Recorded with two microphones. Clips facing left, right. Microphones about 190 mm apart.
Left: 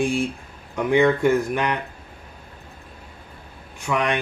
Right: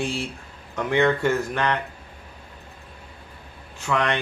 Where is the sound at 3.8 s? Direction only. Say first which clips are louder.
Left 1 dB; 15° left (ahead or behind).